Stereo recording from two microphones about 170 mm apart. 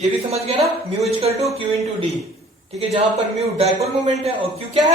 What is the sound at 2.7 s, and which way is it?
A man's voice, 35° right (ahead or behind).